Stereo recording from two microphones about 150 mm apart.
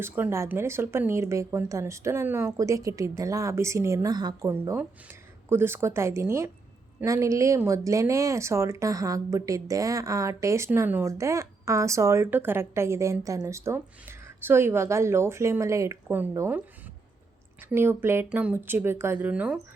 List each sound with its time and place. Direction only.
0.0 s speech: 15° right (ahead or behind)